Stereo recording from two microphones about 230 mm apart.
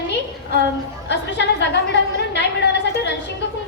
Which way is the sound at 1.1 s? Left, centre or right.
Left.